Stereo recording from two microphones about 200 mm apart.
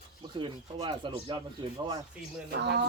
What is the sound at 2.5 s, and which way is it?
Speech, 55° right (ahead or behind).